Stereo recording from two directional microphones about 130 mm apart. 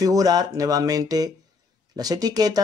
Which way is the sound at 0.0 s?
25° right (ahead or behind).